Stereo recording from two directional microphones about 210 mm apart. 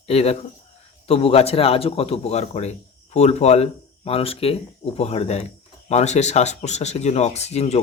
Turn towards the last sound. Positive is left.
turn(degrees=30)  # may be behind; listen again after turning